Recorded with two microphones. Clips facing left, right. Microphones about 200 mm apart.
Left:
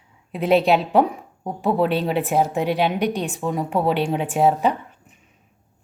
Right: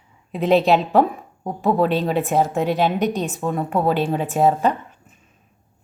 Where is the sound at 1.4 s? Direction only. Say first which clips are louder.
Right 1 dB; 5° left (ahead or behind).